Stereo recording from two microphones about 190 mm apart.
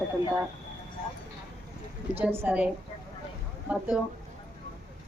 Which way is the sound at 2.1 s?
10° right (ahead or behind).